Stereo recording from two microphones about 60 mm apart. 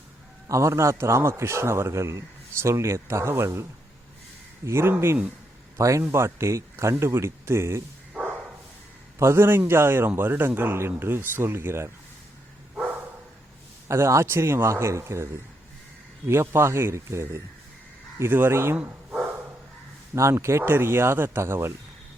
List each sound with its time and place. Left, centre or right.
0.4 s a man's voice: right
5.7 s a man's voice: right
6.0 s a man's voice: right
9.1 s speech: right
13.8 s a man's voice: right
18.2 s speech: right
20.1 s a man's voice: right